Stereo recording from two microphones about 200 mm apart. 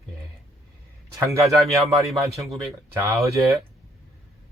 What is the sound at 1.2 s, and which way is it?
Speech, 15° right (ahead or behind).